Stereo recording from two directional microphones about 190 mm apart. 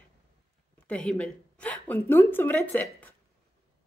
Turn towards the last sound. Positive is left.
turn(degrees=10)  # may be behind; listen again after turning